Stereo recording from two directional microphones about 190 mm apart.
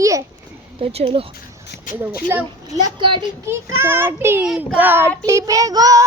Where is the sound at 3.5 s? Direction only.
15° right (ahead or behind).